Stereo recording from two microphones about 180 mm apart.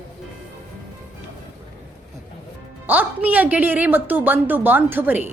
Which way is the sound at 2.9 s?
10° right (ahead or behind).